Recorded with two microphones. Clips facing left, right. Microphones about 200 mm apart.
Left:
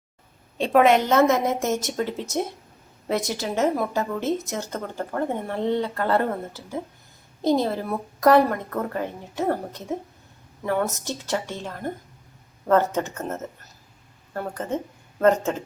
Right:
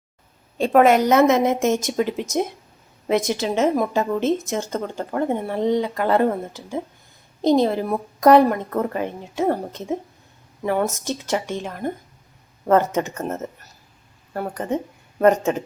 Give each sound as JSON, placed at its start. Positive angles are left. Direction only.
{"t": 0.6, "sound": "a woman's voice", "side_deg": 0}
{"t": 1.0, "sound": "a woman's voice", "side_deg": -20}